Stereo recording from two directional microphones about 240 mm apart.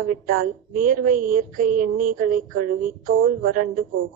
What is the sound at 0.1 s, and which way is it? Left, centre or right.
A woman's voice, right.